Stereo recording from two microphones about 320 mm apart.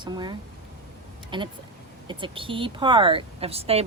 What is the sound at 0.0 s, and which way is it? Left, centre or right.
Speech, centre.